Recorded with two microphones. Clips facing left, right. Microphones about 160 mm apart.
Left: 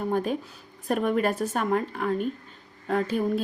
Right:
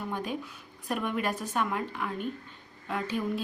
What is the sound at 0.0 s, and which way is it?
A woman's voice, 45° left (ahead or behind).